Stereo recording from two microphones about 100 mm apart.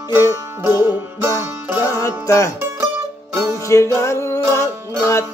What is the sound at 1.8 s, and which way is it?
Music, 30° left (ahead or behind).